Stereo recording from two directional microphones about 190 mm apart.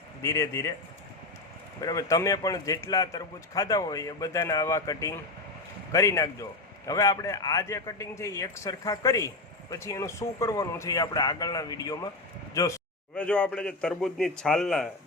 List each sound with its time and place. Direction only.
0.2 s a man's voice: 15° left (ahead or behind)
1.8 s a man's voice: 20° left (ahead or behind)